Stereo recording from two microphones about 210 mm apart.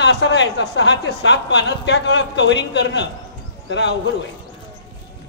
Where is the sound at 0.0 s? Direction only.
55° left (ahead or behind).